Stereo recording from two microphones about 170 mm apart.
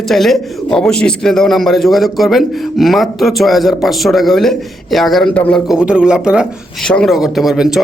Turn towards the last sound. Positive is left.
turn(degrees=-5)  # may be behind; listen again after turning